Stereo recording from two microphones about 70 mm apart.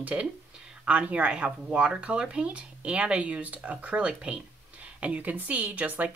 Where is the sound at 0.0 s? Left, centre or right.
Centre.